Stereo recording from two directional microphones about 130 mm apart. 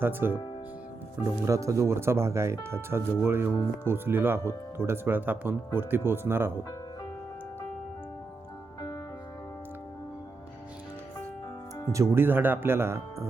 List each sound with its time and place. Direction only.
0.0 s speech: 15° right (ahead or behind)
1.5 s speech: 25° right (ahead or behind)
6.6 s music: 30° left (ahead or behind)
11.9 s speech: 20° right (ahead or behind)